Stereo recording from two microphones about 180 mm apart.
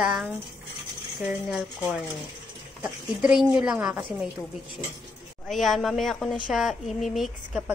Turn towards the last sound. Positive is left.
turn(degrees=0)  # may be behind; listen again after turning